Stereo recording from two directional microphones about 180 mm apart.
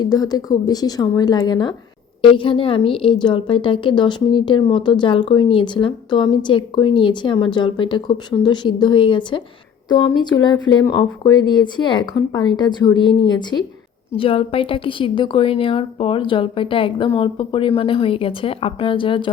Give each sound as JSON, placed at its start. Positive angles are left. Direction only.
{"t": 0.0, "sound": "a woman's voice", "side_deg": 20}